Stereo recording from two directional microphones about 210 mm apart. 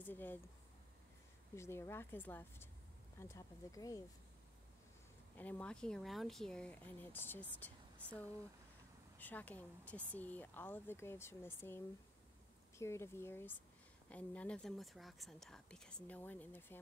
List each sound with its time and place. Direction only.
0.0 s speech: 10° left (ahead or behind)
1.5 s speech: 15° left (ahead or behind)
5.4 s speech: 5° left (ahead or behind)